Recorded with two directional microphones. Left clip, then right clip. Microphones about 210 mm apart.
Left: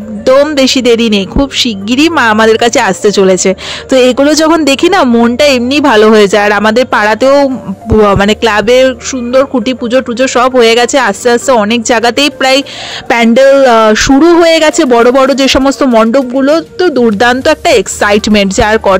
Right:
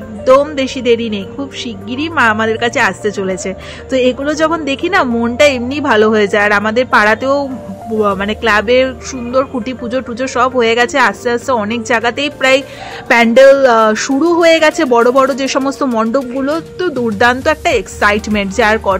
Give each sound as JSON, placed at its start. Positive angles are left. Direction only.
{"t": 0.2, "sound": "a woman's voice", "side_deg": 45}